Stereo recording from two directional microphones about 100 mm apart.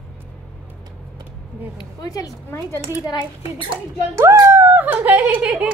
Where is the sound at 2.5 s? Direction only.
25° left (ahead or behind).